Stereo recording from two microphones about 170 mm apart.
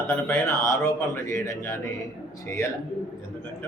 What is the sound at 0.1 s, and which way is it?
Speech, 15° left (ahead or behind).